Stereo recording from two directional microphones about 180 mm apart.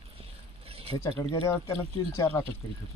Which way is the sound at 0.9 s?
20° left (ahead or behind).